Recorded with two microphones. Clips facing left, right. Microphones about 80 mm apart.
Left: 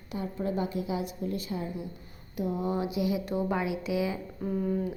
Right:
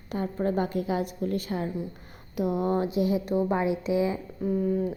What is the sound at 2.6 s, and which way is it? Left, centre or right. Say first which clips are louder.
A woman's voice: right 3 dB; right.